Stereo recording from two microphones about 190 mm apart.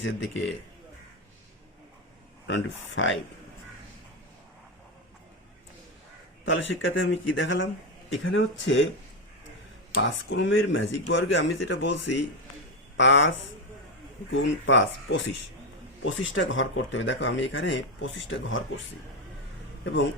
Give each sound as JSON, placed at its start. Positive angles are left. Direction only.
{"t": 0.0, "sound": "speech", "side_deg": 75}
{"t": 2.5, "sound": "speech", "side_deg": 80}
{"t": 6.4, "sound": "speech", "side_deg": 75}
{"t": 8.2, "sound": "speech", "side_deg": 90}
{"t": 10.0, "sound": "speech", "side_deg": 75}
{"t": 14.3, "sound": "speech", "side_deg": 80}